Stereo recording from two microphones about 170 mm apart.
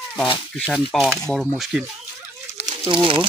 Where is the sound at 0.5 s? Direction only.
Centre (ahead or behind).